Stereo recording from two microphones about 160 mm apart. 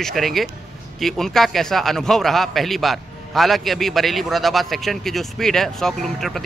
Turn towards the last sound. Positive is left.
turn(degrees=0)  # may be behind; listen again after turning